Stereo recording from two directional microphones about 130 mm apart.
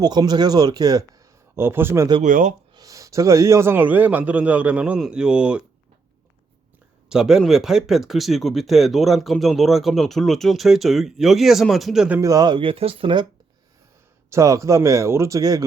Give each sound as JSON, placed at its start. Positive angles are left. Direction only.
{"t": 0.0, "sound": "speech", "side_deg": -30}
{"t": 2.2, "sound": "speech", "side_deg": -75}
{"t": 2.7, "sound": "a man's voice", "side_deg": -25}
{"t": 7.1, "sound": "speech", "side_deg": -5}
{"t": 12.2, "sound": "speech", "side_deg": -30}
{"t": 14.3, "sound": "speech", "side_deg": -25}